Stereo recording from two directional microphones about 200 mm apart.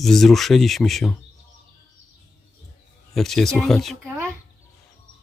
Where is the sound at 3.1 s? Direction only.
Centre (ahead or behind).